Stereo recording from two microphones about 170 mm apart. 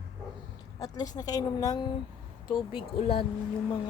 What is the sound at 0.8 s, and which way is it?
A woman's voice, 20° left (ahead or behind).